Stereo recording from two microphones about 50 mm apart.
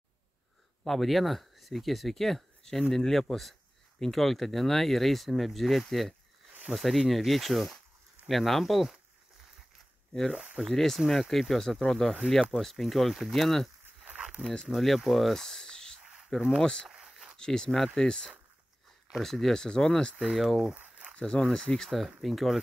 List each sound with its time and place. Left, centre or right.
0.8 s speech: centre
10.6 s speech: centre
14.1 s a sound: centre
14.7 s speech: centre
15.0 s a sound: centre
16.0 s zipper: centre
16.9 s a sound: centre
17.4 s speech: centre
18.0 s speech: centre
19.1 s speech: centre
20.2 s speech: centre
20.8 s crumpling: right
21.2 s speech: left
21.8 s speech: centre